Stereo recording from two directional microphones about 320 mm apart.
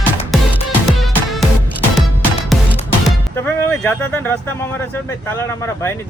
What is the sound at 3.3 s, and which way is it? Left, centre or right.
Speech, centre.